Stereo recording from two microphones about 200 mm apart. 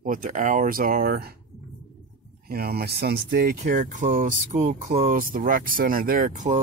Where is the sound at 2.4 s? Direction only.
50° right (ahead or behind).